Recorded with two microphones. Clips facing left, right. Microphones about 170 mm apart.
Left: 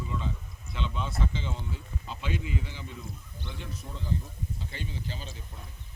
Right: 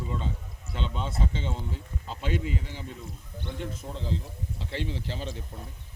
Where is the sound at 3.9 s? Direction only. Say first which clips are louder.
Left 2 dB; 80° right.